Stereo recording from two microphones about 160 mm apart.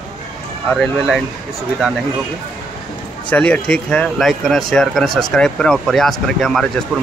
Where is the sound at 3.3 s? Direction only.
10° left (ahead or behind).